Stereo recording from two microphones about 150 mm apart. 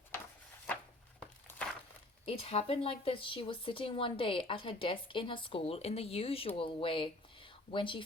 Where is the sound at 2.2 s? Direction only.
40° left (ahead or behind).